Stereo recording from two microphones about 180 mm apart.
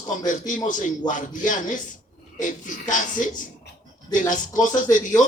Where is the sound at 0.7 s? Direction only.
45° left (ahead or behind).